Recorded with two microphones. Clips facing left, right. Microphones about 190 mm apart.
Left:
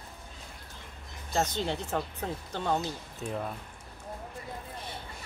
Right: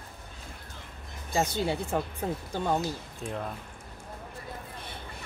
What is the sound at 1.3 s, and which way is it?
Speech, 10° right (ahead or behind).